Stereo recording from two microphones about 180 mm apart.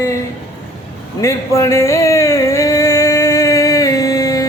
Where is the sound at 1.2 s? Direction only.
15° left (ahead or behind).